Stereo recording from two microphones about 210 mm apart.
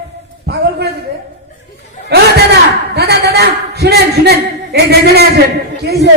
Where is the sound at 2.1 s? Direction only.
50° right (ahead or behind).